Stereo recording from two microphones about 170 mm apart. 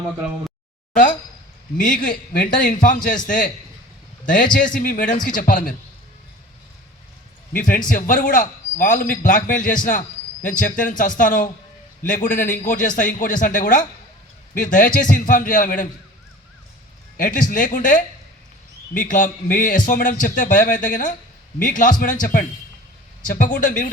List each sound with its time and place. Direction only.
1.8 s a man's voice: 50° left (ahead or behind)
4.5 s a man's voice: 55° left (ahead or behind)
7.5 s a man's voice: 55° left (ahead or behind)
17.2 s a man's voice: 50° left (ahead or behind)